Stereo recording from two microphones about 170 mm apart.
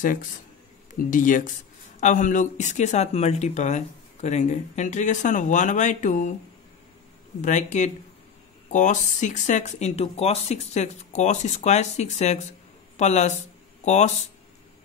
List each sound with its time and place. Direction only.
0.0 s speech: 50° left (ahead or behind)
7.4 s speech: 45° left (ahead or behind)